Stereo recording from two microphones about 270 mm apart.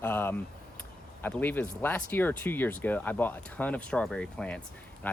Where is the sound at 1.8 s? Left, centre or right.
Centre.